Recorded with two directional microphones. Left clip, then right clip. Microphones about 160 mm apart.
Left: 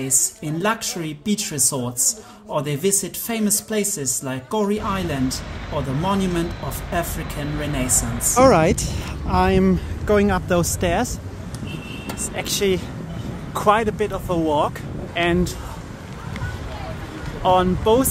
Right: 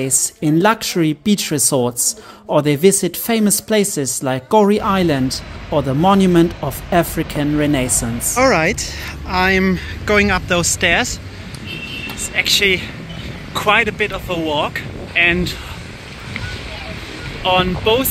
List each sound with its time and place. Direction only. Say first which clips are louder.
0.0 s speech: right 5 dB; 55° right (ahead or behind)
8.4 s speech: even; 15° left (ahead or behind)
12.4 s speech: right 8 dB; 10° left (ahead or behind)
17.4 s speech: right 1 dB; 10° left (ahead or behind)